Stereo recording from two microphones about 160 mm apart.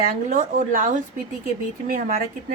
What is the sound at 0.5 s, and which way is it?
A woman's voice, 55° right (ahead or behind).